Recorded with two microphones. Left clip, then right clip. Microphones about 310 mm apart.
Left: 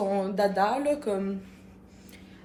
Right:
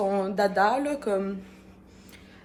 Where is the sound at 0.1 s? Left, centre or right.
Centre.